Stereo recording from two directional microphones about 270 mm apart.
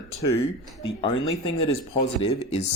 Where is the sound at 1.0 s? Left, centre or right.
Centre.